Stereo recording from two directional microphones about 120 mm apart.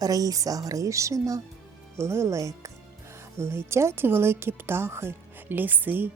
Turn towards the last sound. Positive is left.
turn(degrees=-15)  # may be behind; listen again after turning